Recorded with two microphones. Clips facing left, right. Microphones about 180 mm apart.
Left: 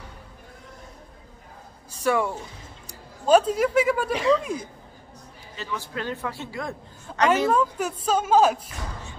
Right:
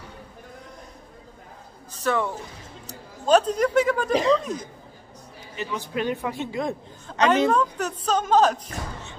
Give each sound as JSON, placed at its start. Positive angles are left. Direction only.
{"t": 1.9, "sound": "a sound", "side_deg": 10}
{"t": 2.9, "sound": "a woman's voice", "side_deg": 10}
{"t": 5.6, "sound": "a man's voice", "side_deg": -20}
{"t": 7.2, "sound": "a woman's voice", "side_deg": 5}